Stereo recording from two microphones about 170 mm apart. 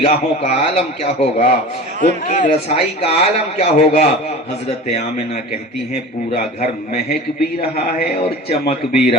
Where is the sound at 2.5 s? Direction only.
35° left (ahead or behind).